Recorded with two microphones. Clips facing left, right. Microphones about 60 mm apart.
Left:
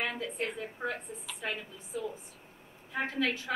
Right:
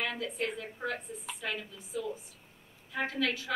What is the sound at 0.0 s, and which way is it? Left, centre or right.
A woman's voice, left.